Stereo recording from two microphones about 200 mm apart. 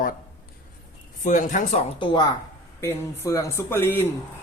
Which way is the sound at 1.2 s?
40° left (ahead or behind).